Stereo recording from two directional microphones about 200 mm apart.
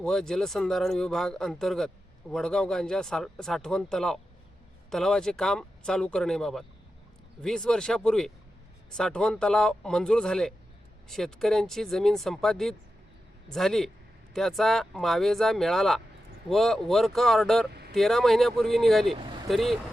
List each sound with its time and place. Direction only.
0.0 s speech: centre (ahead or behind)
17.7 s a sound: 55° right (ahead or behind)
17.9 s speech: centre (ahead or behind)